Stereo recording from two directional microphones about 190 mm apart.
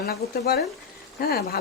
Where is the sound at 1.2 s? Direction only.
50° left (ahead or behind).